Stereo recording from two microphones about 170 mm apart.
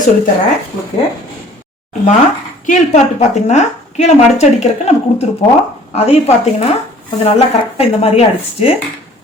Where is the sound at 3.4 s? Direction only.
45° left (ahead or behind).